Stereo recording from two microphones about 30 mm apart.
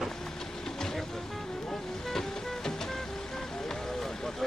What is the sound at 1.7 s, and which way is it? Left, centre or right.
Ocean, centre.